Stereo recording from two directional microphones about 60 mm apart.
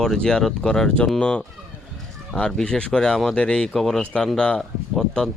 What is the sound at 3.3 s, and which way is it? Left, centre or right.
Speech, centre.